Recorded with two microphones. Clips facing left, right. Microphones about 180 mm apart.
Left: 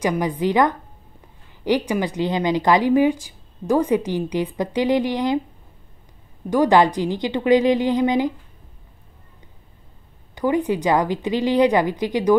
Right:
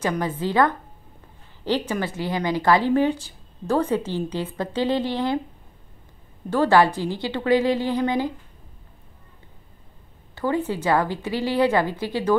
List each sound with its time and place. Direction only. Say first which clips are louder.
0.0 s speech: left 4 dB; 15° left (ahead or behind)
6.5 s speech: left 2 dB; 15° left (ahead or behind)
10.3 s speech: left 4 dB; 15° left (ahead or behind)